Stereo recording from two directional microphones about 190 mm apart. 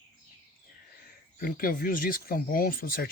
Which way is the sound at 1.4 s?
50° left (ahead or behind).